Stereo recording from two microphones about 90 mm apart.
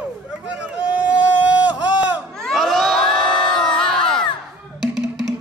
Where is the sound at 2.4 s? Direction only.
Centre (ahead or behind).